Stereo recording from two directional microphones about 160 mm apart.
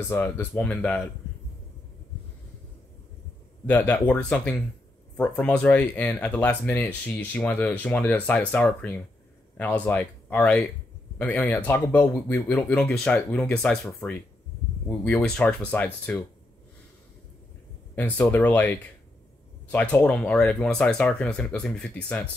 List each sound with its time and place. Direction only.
0.1 s speech: 10° left (ahead or behind)
3.6 s speech: 10° left (ahead or behind)
14.0 s speech: 20° left (ahead or behind)
14.9 s speech: 5° left (ahead or behind)
17.9 s speech: 10° left (ahead or behind)